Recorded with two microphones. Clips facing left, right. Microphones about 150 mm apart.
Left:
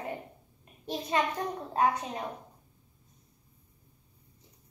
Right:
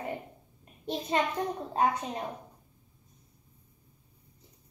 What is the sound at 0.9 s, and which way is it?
Speech, 25° right (ahead or behind).